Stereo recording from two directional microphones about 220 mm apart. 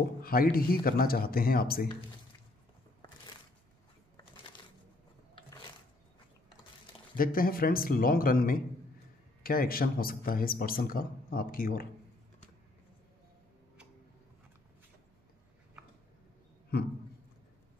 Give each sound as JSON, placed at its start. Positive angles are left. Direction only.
{"t": 0.2, "sound": "speech", "side_deg": 40}
{"t": 7.2, "sound": "a man's voice", "side_deg": 40}